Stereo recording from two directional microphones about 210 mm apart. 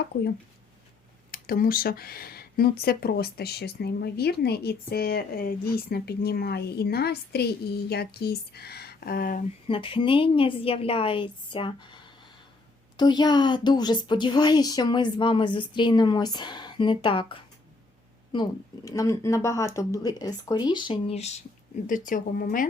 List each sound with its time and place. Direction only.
1.3 s speech: 45° left (ahead or behind)
9.6 s speech: 25° left (ahead or behind)
18.9 s speech: 15° left (ahead or behind); by 22.7 s 40° left (ahead or behind)